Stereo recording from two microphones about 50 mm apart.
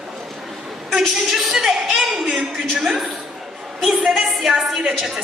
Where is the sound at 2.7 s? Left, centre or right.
Centre.